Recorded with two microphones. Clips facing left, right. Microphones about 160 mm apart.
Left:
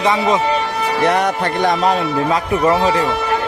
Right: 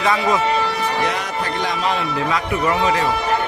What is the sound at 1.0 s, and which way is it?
Music, 60° left (ahead or behind).